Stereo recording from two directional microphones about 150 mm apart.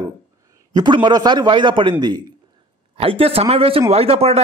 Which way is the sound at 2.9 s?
40° right (ahead or behind).